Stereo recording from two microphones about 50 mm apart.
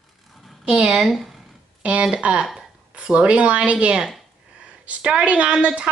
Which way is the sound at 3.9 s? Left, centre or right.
Centre.